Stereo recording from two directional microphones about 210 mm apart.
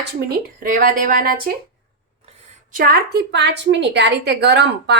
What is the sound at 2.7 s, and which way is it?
A woman's voice, 45° right (ahead or behind).